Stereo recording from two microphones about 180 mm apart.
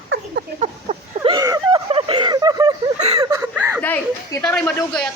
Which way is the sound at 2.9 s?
35° right (ahead or behind).